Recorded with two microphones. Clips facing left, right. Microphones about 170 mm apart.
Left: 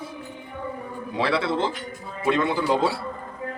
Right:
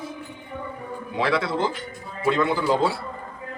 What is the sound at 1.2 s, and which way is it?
Speech, 30° left (ahead or behind).